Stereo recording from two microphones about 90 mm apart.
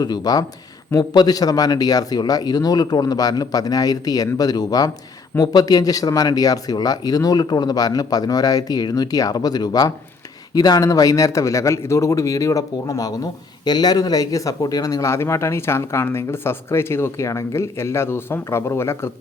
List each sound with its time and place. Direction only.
0.0 s speech: 45° left (ahead or behind); by 19.1 s 30° left (ahead or behind)